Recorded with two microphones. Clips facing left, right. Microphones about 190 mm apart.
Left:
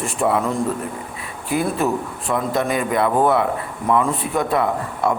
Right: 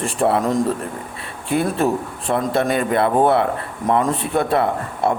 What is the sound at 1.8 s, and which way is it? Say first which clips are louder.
A man's voice: right 2 dB; 30° right (ahead or behind).